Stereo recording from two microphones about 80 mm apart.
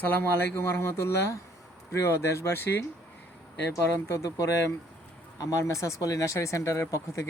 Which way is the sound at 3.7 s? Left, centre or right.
Left.